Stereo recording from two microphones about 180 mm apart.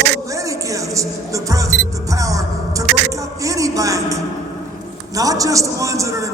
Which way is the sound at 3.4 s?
20° right (ahead or behind).